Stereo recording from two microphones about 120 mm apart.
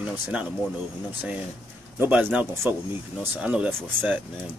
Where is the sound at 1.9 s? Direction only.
15° right (ahead or behind).